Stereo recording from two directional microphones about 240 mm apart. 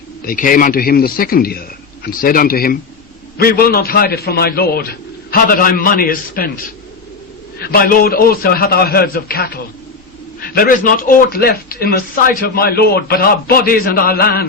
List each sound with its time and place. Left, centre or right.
0.3 s speech: left
7.6 s speech: left